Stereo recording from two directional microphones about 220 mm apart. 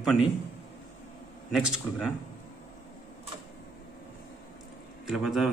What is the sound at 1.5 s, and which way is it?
Speech, centre (ahead or behind).